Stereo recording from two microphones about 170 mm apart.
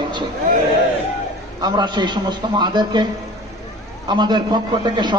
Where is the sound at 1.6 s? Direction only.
25° right (ahead or behind).